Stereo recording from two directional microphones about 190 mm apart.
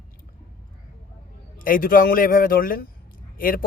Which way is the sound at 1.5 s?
45° left (ahead or behind).